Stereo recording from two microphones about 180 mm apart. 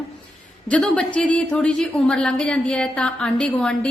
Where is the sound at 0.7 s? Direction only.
5° left (ahead or behind).